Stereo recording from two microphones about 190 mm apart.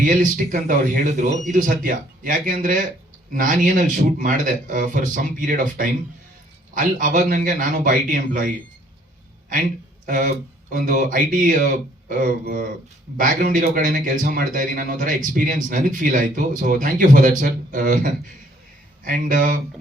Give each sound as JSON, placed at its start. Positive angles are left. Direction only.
{"t": 0.0, "sound": "a man's voice", "side_deg": -45}
{"t": 10.1, "sound": "a man's voice", "side_deg": -45}